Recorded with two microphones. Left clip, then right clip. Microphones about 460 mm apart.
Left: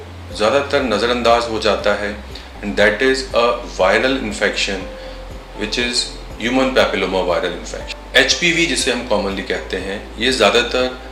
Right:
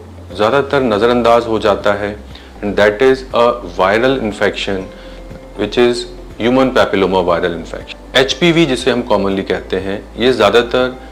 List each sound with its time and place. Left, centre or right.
0.3 s speech: right